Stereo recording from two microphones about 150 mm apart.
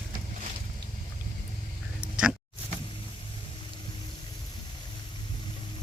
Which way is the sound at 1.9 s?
5° right (ahead or behind).